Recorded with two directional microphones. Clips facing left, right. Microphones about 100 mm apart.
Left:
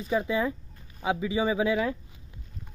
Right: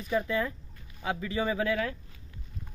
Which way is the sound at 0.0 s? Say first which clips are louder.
Left 2 dB; 20° left (ahead or behind).